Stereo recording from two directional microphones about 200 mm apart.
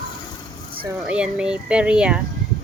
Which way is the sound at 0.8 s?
5° right (ahead or behind).